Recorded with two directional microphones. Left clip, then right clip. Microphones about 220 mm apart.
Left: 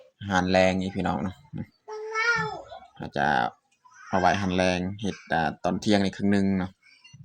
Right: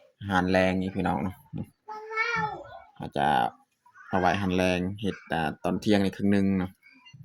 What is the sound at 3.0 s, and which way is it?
Speech, centre (ahead or behind).